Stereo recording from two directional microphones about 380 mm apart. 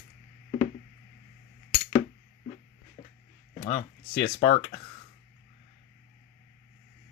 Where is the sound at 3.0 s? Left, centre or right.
Centre.